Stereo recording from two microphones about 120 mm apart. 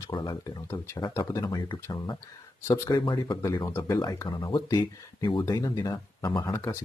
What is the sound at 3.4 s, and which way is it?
Speech, 20° left (ahead or behind).